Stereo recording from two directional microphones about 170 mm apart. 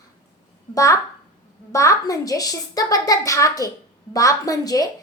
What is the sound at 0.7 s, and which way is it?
A woman's voice, 20° left (ahead or behind).